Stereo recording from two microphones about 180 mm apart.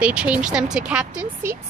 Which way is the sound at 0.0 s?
5° right (ahead or behind).